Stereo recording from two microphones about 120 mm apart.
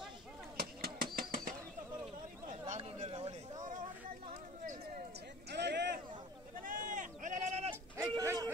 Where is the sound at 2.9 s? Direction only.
50° right (ahead or behind); by 3.8 s 90° right.